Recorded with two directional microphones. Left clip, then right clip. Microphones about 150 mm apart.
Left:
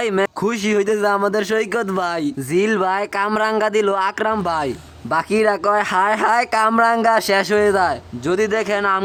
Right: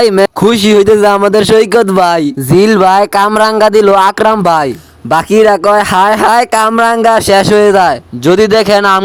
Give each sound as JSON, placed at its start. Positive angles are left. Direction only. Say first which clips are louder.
{"t": 0.2, "sound": "a man's voice", "louder": "right 12 dB", "side_deg": -45}